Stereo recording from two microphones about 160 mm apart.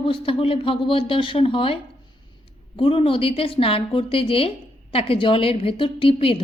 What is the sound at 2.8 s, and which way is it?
Speech, 35° left (ahead or behind).